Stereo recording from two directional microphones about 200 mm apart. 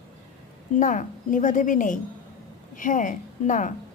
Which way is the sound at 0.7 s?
40° left (ahead or behind).